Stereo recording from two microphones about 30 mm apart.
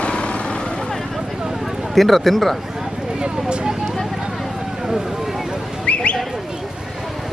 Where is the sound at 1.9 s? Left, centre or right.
Centre.